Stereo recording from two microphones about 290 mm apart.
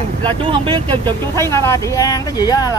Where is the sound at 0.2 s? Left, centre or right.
Centre.